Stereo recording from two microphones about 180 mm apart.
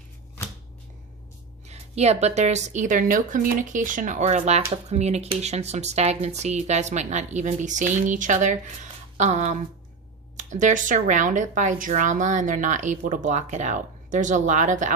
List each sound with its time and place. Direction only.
1.6 s speech: 35° right (ahead or behind)